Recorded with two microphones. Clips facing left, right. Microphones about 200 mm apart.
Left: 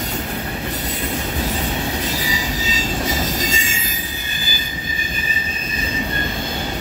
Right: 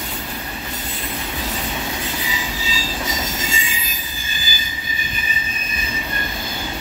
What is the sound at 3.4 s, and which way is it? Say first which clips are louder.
Train wheels squealing: left 3 dB; 40° left (ahead or behind).